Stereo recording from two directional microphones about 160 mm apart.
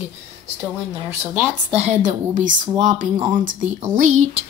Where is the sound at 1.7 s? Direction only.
45° right (ahead or behind).